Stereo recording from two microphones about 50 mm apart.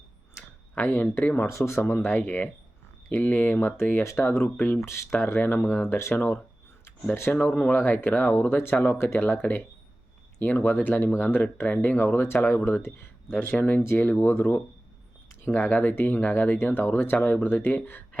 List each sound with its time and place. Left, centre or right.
0.8 s speech: left
1.5 s speech: left
2.2 s speech: left
4.0 s speech: left
4.4 s speech: left
4.8 s speech: left
5.4 s speech: left
6.8 s speech: left
9.1 s speech: left
11.6 s speech: left
11.9 s speech: left
13.4 s speech: left